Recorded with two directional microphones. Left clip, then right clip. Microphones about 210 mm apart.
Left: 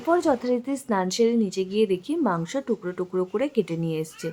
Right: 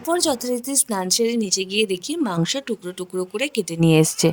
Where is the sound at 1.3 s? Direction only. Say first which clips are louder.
Right 3 dB; 50° right (ahead or behind).